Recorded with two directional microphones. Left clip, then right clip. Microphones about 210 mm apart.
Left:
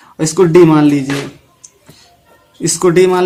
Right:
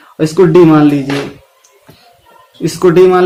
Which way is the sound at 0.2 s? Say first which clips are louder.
Right 1 dB; 40° left (ahead or behind).